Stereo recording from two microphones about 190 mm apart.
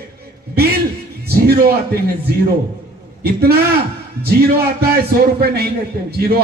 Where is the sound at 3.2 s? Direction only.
55° right (ahead or behind).